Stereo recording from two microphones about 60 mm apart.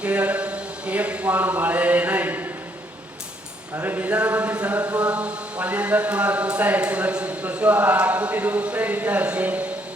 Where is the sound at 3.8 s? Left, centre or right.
Right.